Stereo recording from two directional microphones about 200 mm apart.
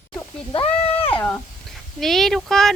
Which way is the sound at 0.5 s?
30° left (ahead or behind).